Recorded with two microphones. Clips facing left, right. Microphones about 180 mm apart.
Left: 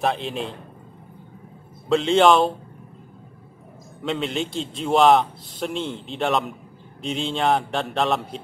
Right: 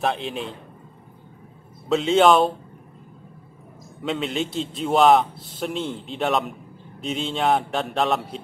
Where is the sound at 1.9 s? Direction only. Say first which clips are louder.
Even; centre (ahead or behind).